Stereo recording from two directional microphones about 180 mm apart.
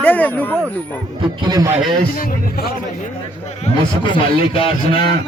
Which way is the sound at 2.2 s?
55° left (ahead or behind).